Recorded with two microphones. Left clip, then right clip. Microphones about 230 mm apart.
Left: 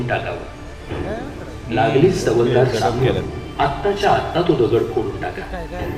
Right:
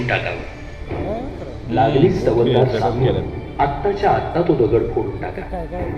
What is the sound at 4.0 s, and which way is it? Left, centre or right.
Speech, left.